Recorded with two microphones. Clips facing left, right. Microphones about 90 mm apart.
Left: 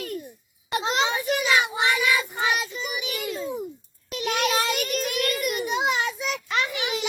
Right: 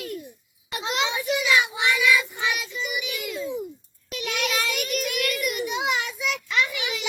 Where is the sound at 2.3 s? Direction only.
45° left (ahead or behind).